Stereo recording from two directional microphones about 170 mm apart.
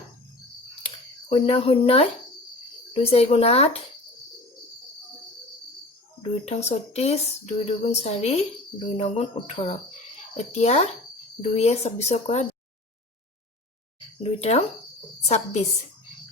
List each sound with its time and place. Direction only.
0.8 s a sound: 35° left (ahead or behind)
2.9 s speech: 35° left (ahead or behind)
6.2 s speech: 40° left (ahead or behind)
14.2 s speech: 35° left (ahead or behind)